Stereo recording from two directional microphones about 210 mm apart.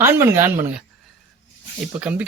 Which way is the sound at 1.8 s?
5° right (ahead or behind).